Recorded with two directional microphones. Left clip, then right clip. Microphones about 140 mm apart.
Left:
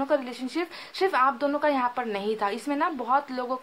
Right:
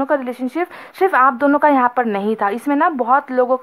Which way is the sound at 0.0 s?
40° right (ahead or behind).